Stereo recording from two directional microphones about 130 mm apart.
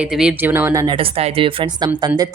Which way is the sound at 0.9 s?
45° right (ahead or behind).